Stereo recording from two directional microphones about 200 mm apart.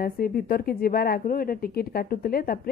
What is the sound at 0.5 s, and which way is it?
Speech, 50° left (ahead or behind).